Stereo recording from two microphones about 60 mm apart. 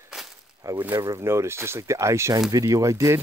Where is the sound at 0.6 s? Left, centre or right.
Right.